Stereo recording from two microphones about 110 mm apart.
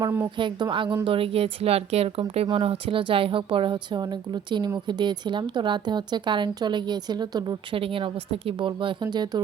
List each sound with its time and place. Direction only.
0.3 s a woman's voice: 45° right (ahead or behind)